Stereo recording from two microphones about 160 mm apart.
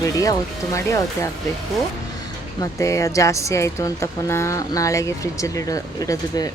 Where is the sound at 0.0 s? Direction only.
20° left (ahead or behind).